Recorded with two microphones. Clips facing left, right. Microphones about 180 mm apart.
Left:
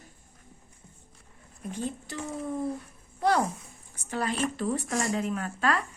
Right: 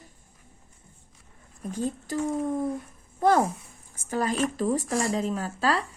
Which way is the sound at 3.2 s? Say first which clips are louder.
Right 4 dB; 45° right (ahead or behind).